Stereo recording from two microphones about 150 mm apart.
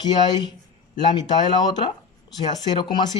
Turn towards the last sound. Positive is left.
turn(degrees=30)  # may be behind; listen again after turning